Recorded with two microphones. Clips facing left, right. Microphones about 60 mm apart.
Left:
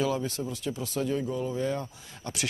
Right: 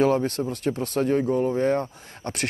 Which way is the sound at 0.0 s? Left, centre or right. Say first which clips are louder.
Right 8 dB; right.